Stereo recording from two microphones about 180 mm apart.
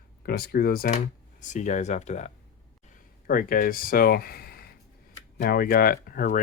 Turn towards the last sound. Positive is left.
turn(degrees=50)  # may be behind; listen again after turning